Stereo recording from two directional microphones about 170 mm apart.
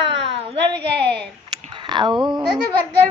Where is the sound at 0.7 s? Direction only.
90° right.